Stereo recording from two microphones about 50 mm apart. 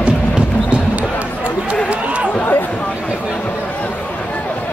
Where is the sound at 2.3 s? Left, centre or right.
Left.